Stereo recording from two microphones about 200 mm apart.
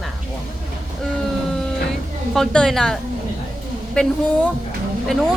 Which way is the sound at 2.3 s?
5° left (ahead or behind).